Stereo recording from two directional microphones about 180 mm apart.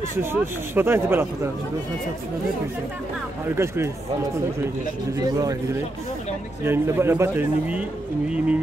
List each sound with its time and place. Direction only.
0.2 s speech: 10° right (ahead or behind)
3.4 s speech: 15° right (ahead or behind)
5.1 s speech: 20° right (ahead or behind)
6.6 s speech: 10° right (ahead or behind)